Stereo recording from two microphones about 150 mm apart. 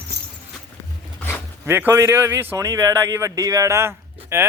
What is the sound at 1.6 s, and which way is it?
Speech, 15° right (ahead or behind).